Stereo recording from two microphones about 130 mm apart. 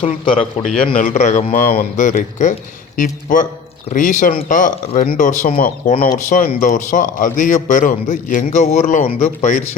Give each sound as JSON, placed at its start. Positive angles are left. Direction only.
{"t": 0.0, "sound": "a man's voice", "side_deg": 45}
{"t": 0.9, "sound": "speech", "side_deg": 75}
{"t": 3.9, "sound": "a man's voice", "side_deg": 80}
{"t": 4.4, "sound": "speech", "side_deg": 90}
{"t": 4.9, "sound": "a man's voice", "side_deg": 75}
{"t": 9.0, "sound": "speech", "side_deg": 50}